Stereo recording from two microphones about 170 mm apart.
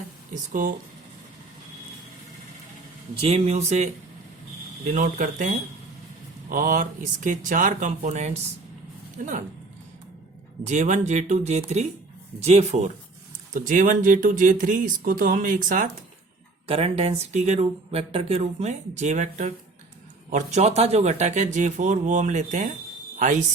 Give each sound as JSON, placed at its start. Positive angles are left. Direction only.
{"t": 3.2, "sound": "speech", "side_deg": -40}
{"t": 4.9, "sound": "speech", "side_deg": -50}
{"t": 10.7, "sound": "speech", "side_deg": -45}
{"t": 13.5, "sound": "speech", "side_deg": -50}
{"t": 16.6, "sound": "speech", "side_deg": -35}